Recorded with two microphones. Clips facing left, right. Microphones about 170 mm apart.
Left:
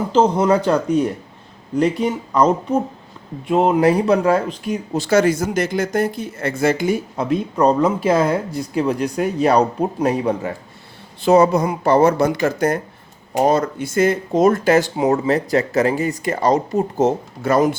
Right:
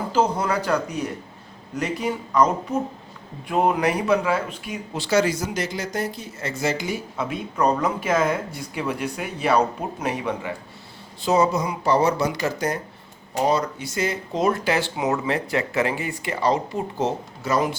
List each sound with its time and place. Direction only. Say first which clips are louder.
0.1 s speech: left 7 dB; 25° left (ahead or behind); by 7.3 s 50° left (ahead or behind)
7.5 s speech: left 5 dB; 30° left (ahead or behind)
11.2 s speech: left 7 dB; 60° left (ahead or behind)